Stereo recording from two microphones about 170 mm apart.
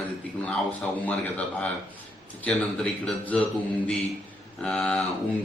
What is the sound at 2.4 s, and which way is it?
Speech, 5° left (ahead or behind).